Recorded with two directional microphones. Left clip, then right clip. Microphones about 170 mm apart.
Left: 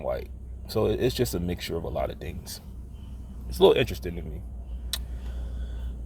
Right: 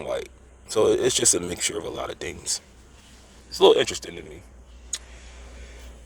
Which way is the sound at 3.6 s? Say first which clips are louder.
Right 3 dB; 25° right (ahead or behind).